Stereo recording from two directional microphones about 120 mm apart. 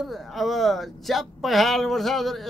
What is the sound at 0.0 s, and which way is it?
Speech, centre (ahead or behind).